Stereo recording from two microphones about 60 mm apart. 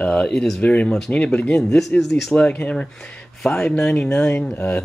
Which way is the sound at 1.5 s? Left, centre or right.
Centre.